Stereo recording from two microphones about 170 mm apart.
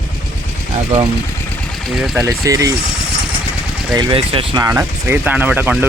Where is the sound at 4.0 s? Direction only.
30° right (ahead or behind).